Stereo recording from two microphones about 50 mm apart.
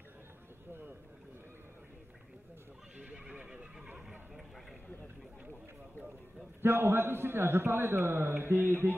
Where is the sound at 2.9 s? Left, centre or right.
Right.